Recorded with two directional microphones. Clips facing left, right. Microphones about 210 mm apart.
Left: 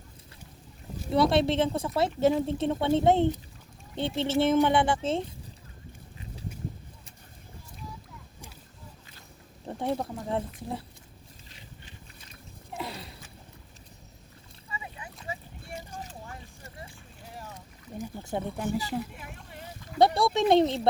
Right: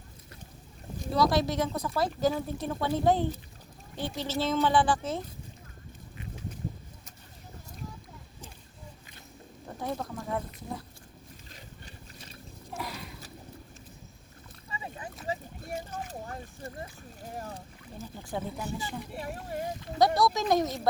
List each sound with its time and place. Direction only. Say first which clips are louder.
1.1 s a woman's voice: left 3 dB; 25° left (ahead or behind)
9.6 s a woman's voice: left 4 dB; 30° left (ahead or behind)
12.7 s a sound: left 1 dB; 25° left (ahead or behind)
14.7 s boat: right 2 dB; 40° right (ahead or behind)
16.0 s a sound: right 4 dB; 40° right (ahead or behind)
17.9 s speech: left 4 dB; 20° left (ahead or behind)
19.1 s speech: right 9 dB; 40° right (ahead or behind)
20.0 s a woman's voice: left 2 dB; 30° left (ahead or behind)